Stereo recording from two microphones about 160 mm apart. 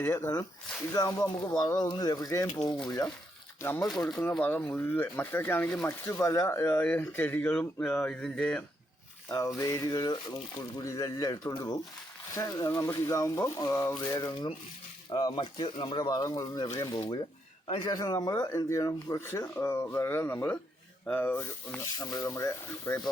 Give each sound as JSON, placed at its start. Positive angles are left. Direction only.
{"t": 0.0, "sound": "speech", "side_deg": 15}
{"t": 3.6, "sound": "speech", "side_deg": 15}
{"t": 3.8, "sound": "speech", "side_deg": 5}
{"t": 9.6, "sound": "speech", "side_deg": 20}
{"t": 21.9, "sound": "speech", "side_deg": 20}